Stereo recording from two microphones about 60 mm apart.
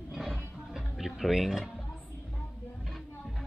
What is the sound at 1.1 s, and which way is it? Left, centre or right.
Speech, centre.